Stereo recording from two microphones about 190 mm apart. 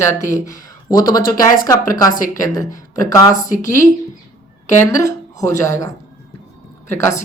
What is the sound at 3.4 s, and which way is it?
Speech, 45° left (ahead or behind).